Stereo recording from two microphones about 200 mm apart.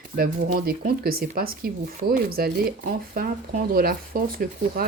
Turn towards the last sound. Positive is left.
turn(degrees=-45)  # may be behind; listen again after turning